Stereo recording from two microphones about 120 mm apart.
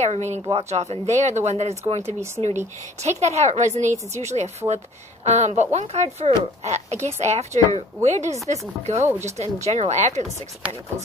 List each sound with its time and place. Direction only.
0.0 s a woman's voice: 70° right (ahead or behind)
2.4 s a woman's voice: 70° right (ahead or behind)